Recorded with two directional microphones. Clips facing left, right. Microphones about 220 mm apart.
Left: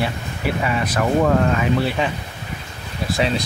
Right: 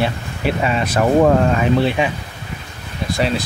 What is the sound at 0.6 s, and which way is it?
Speech, 25° right (ahead or behind).